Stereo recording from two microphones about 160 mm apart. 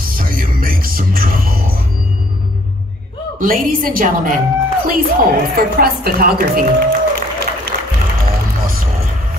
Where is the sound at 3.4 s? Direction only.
60° right (ahead or behind).